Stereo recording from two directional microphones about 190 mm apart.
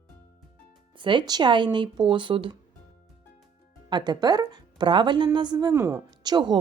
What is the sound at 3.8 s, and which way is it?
A woman's voice, 25° right (ahead or behind).